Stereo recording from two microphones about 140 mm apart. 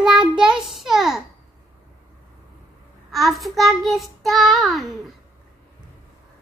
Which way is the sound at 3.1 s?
Centre (ahead or behind).